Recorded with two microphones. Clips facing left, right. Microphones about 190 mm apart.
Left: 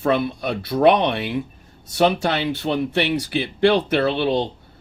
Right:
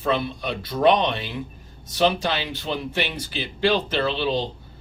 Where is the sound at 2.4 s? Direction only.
60° left (ahead or behind).